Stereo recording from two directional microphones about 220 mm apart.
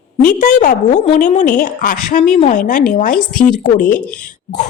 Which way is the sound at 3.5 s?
35° left (ahead or behind).